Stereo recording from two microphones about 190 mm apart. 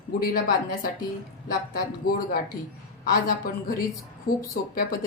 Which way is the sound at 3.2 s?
45° left (ahead or behind).